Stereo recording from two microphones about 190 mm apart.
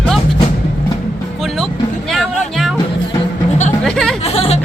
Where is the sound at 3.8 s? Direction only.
5° left (ahead or behind).